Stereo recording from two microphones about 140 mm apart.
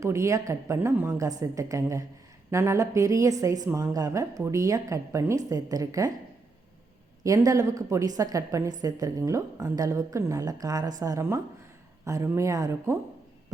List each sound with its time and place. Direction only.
0.0 s a woman's voice: 20° right (ahead or behind)
7.3 s a woman's voice: 25° right (ahead or behind)